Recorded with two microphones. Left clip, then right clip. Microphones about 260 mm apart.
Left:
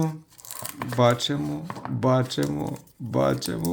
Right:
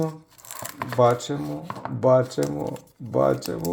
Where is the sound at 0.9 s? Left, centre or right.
Left.